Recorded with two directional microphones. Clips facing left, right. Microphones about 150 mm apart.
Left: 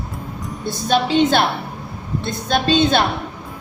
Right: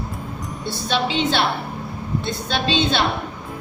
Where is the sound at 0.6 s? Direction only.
45° left (ahead or behind).